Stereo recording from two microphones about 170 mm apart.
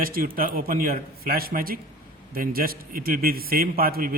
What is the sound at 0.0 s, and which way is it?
A man's voice, 60° right (ahead or behind).